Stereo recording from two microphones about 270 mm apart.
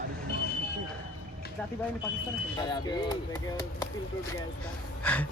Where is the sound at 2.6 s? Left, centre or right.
Centre.